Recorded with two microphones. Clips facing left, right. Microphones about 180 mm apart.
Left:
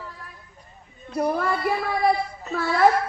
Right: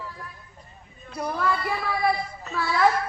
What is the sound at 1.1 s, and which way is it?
A man's voice, 45° left (ahead or behind).